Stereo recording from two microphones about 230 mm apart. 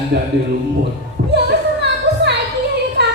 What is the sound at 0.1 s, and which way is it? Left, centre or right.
Speech, right.